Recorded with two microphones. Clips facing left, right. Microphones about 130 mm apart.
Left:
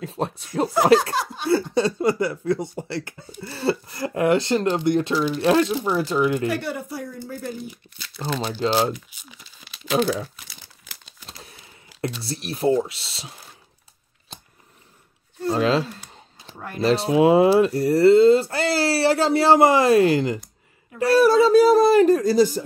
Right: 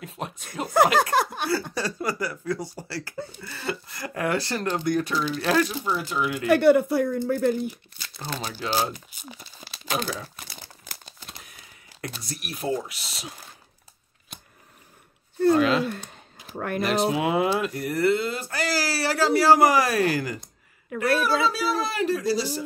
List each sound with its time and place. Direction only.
0.0 s speech: 30° left (ahead or behind)
1.1 s speech: 55° right (ahead or behind)
1.7 s speech: 25° left (ahead or behind)
5.9 s speech: 35° left (ahead or behind)
6.5 s speech: 60° right (ahead or behind)
8.5 s speech: 30° left (ahead or behind)
8.9 s crumpling: 40° right (ahead or behind)
12.0 s speech: 30° left (ahead or behind)
14.3 s scissors: 30° left (ahead or behind)
15.5 s speech: 30° left (ahead or behind)
16.5 s speech: 60° right (ahead or behind)
16.8 s speech: 30° left (ahead or behind)
21.2 s speech: 40° left (ahead or behind)